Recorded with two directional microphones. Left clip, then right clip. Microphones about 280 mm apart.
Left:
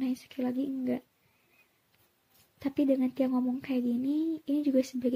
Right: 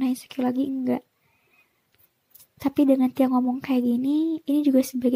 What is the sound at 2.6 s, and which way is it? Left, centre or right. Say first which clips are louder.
Speech: right 8 dB; right.